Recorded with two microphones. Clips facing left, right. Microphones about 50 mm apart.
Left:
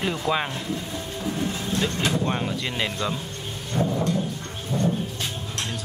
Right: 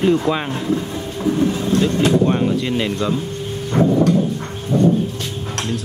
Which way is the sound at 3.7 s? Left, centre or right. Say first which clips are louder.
Right 9 dB; right.